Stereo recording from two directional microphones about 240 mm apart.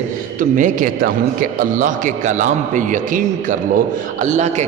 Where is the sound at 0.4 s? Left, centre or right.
Right.